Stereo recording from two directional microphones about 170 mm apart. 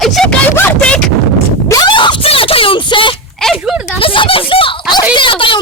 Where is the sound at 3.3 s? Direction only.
Centre (ahead or behind).